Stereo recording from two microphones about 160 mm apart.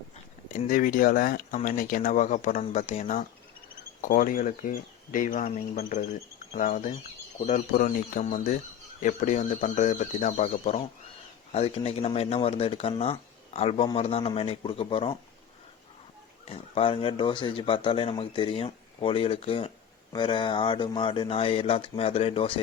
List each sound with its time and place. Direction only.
0.5 s speech: 60° left (ahead or behind)
4.0 s speech: 60° left (ahead or behind)
6.5 s speech: 55° left (ahead or behind); by 15.2 s 35° left (ahead or behind)
16.5 s speech: 35° left (ahead or behind)